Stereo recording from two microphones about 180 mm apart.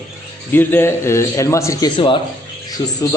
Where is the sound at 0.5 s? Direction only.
10° left (ahead or behind).